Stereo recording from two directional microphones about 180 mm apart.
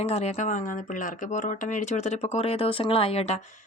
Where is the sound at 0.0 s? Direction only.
35° left (ahead or behind).